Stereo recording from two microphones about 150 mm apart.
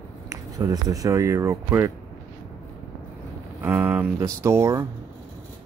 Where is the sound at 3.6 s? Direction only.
10° right (ahead or behind).